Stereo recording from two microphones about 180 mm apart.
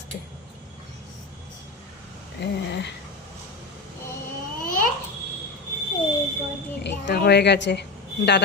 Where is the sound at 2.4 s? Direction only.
70° left (ahead or behind).